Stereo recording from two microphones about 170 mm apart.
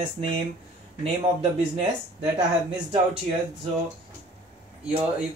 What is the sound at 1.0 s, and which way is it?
Speech, 40° right (ahead or behind).